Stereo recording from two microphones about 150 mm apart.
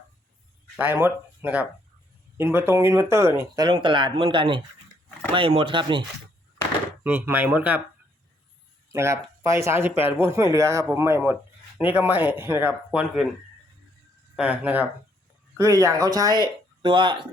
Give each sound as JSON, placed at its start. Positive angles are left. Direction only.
{"t": 0.8, "sound": "speech", "side_deg": -15}
{"t": 7.0, "sound": "speech", "side_deg": -15}
{"t": 8.9, "sound": "speech", "side_deg": -20}
{"t": 14.3, "sound": "speech", "side_deg": -10}